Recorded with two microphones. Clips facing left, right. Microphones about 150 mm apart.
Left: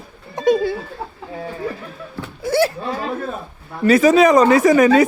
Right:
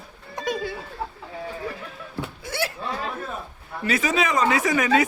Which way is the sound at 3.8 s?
40° left (ahead or behind).